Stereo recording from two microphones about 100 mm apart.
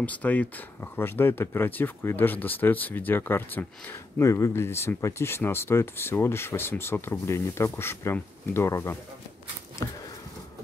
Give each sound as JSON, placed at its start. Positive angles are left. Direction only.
{"t": 0.0, "sound": "speech", "side_deg": 15}
{"t": 4.2, "sound": "speech", "side_deg": 30}